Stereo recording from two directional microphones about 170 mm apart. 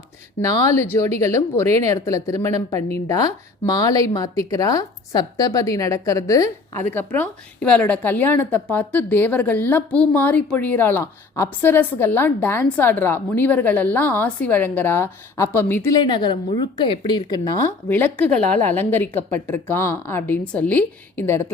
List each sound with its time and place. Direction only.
0.4 s a woman's voice: 15° left (ahead or behind)
16.0 s a woman's voice: 25° left (ahead or behind)